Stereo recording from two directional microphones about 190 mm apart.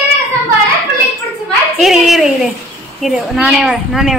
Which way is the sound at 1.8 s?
Centre (ahead or behind).